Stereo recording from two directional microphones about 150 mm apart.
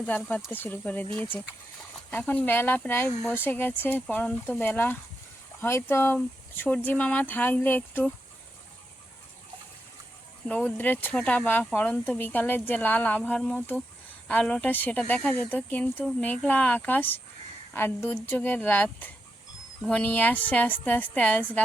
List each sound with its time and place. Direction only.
0.5 s speech: 10° left (ahead or behind)
2.0 s speech: 10° left (ahead or behind)
10.5 s speech: 5° left (ahead or behind)